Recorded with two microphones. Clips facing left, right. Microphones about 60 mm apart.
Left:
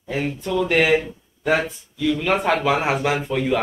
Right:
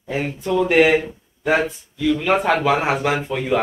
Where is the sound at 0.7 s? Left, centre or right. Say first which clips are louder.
Right 3 dB; centre.